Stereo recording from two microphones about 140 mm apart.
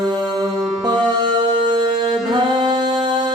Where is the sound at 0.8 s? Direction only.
30° right (ahead or behind).